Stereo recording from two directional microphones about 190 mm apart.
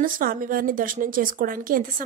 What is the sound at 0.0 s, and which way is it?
A woman's voice, 50° right (ahead or behind).